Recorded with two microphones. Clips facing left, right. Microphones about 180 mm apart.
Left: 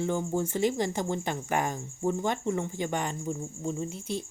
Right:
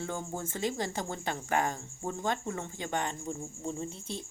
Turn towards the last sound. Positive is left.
turn(degrees=-25)  # may be behind; listen again after turning